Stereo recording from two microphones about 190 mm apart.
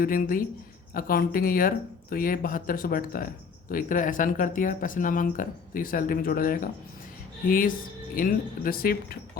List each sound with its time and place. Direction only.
0.0 s speech: 50° left (ahead or behind)
8.1 s speech: 45° left (ahead or behind)